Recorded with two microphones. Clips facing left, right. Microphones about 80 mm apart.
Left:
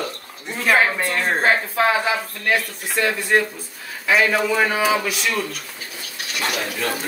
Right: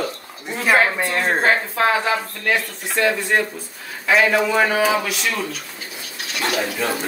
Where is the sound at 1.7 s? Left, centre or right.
Centre.